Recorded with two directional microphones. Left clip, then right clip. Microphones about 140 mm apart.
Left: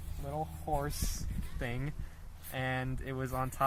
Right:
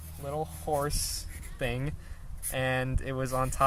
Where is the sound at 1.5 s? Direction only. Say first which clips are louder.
Right 7 dB; 65° right (ahead or behind).